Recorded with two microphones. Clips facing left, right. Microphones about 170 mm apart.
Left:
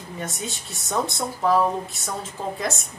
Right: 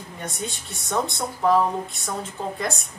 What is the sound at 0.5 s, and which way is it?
Speech, centre (ahead or behind).